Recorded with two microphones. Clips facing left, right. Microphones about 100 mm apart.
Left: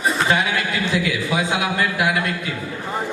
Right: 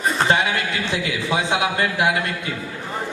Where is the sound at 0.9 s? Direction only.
25° right (ahead or behind).